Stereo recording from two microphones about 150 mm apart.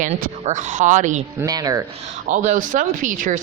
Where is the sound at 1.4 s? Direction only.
25° right (ahead or behind).